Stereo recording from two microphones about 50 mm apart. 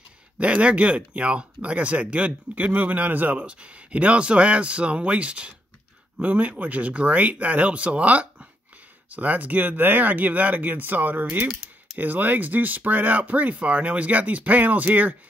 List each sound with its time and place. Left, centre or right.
0.4 s speech: right